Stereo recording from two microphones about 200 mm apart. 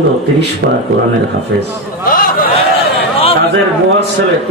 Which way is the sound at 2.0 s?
45° left (ahead or behind).